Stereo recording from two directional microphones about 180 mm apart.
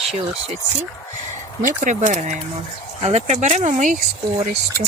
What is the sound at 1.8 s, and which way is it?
Speech, 45° right (ahead or behind).